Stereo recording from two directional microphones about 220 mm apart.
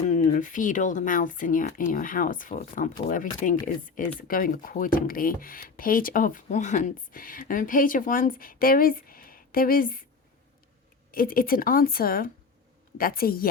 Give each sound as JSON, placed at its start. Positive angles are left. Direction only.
{"t": 0.1, "sound": "speech", "side_deg": 35}
{"t": 11.1, "sound": "speech", "side_deg": 40}